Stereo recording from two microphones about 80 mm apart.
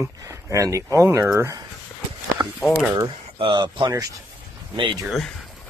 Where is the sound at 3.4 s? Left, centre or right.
Right.